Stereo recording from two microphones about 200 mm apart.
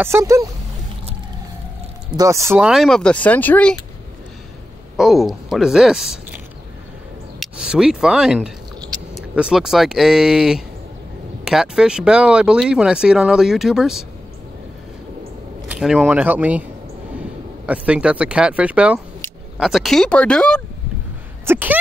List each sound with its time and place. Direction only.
0.0 s speech: 15° right (ahead or behind)
2.1 s speech: 15° right (ahead or behind); by 3.7 s 10° left (ahead or behind)
4.9 s speech: centre (ahead or behind)
15.7 s speech: centre (ahead or behind)
21.5 s speech: 10° right (ahead or behind)